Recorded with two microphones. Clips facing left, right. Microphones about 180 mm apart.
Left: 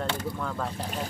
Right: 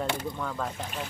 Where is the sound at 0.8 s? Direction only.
35° left (ahead or behind).